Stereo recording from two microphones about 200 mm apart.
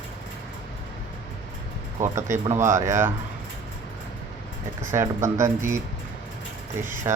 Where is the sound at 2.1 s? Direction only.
15° right (ahead or behind).